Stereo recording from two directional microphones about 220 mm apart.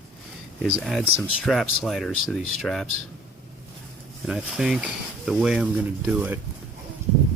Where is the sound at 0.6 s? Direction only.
Centre (ahead or behind).